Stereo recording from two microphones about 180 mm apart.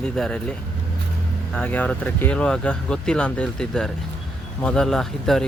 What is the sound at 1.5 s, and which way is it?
Speech, 5° left (ahead or behind).